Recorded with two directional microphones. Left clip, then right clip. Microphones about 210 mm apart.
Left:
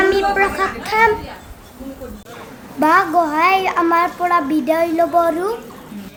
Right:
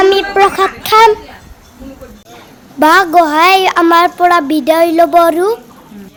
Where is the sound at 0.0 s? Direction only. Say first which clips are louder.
Right 6 dB; 40° right (ahead or behind).